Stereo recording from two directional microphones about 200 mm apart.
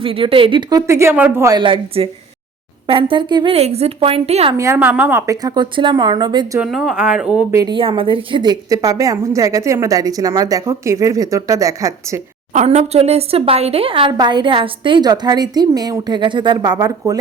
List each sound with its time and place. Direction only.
0.0 s speech: 25° right (ahead or behind)
4.5 s a woman's voice: 15° right (ahead or behind)
6.6 s speech: centre (ahead or behind)
7.5 s a woman's voice: 20° right (ahead or behind)
12.5 s speech: 30° right (ahead or behind)